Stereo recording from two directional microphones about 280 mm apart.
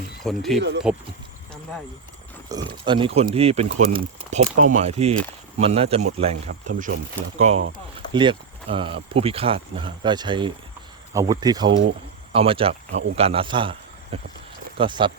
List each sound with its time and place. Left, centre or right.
0.3 s speech: centre
2.5 s a man's voice: centre